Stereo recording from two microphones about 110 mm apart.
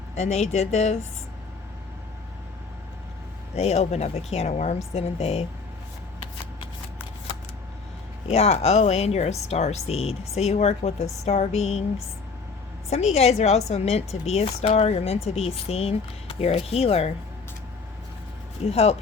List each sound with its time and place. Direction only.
0.2 s speech: 80° left
3.5 s speech: 75° left (ahead or behind)
8.3 s speech: 70° left (ahead or behind)
18.6 s speech: 70° left (ahead or behind)